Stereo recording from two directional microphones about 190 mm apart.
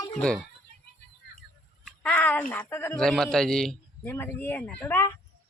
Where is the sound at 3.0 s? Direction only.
Centre (ahead or behind).